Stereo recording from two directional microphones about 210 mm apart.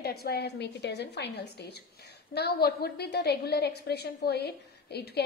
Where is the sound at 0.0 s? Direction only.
50° left (ahead or behind).